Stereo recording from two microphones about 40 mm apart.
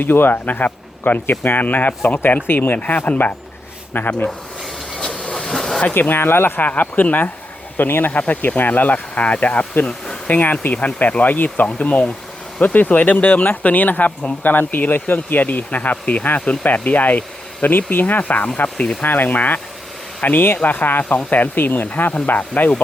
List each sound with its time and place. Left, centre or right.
0.0 s speech: left
4.9 s train: left
5.3 s vehicle: centre
5.9 s speech: left
6.7 s speech: left
7.8 s speech: left
8.1 s speech: left
8.4 s speech: left
11.6 s speech: left
19.0 s speech: left
21.6 s speech: left
22.3 s speech: left